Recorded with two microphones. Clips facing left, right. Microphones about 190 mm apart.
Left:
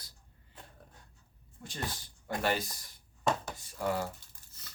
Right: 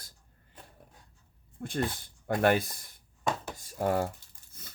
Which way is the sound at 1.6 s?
55° right (ahead or behind).